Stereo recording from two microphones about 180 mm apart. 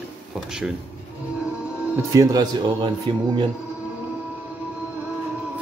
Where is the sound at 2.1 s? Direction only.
20° right (ahead or behind).